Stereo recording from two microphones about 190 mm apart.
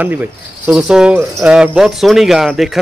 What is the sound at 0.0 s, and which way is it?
A man's voice, 10° right (ahead or behind).